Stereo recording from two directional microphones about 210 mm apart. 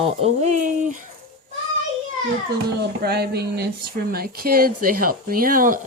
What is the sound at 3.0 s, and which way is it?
Speech, 50° right (ahead or behind).